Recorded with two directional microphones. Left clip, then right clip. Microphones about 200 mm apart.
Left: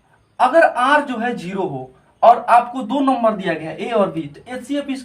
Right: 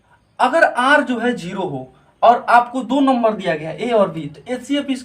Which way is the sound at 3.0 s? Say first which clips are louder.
Right 1 dB; 25° right (ahead or behind).